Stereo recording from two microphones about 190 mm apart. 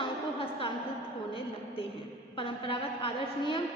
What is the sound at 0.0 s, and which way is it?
Music, 25° left (ahead or behind).